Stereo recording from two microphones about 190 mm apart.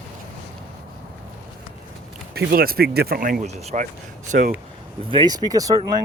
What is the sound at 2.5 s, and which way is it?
Speech, 50° right (ahead or behind).